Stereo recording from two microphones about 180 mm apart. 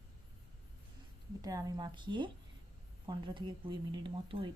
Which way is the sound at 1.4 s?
20° right (ahead or behind).